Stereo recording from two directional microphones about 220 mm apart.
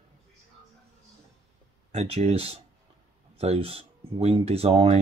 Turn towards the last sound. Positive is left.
turn(degrees=-25)  # may be behind; listen again after turning